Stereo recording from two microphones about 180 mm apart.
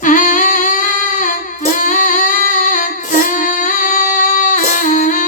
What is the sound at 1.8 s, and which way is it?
Female singing, 45° left (ahead or behind).